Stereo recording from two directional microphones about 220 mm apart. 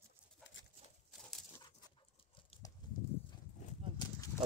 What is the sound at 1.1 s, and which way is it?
Dog, centre (ahead or behind).